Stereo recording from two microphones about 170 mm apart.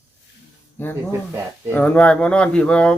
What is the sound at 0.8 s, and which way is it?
A man's voice, 10° left (ahead or behind).